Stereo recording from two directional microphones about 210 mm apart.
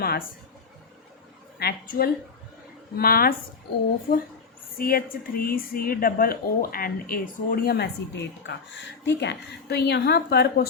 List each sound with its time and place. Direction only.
1.5 s a woman's voice: 50° left (ahead or behind)